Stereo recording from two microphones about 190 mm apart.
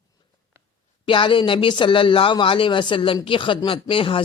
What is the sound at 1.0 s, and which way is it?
A man's voice, 25° left (ahead or behind).